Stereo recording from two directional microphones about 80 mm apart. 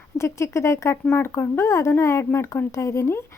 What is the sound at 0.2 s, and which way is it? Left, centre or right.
Speech, left.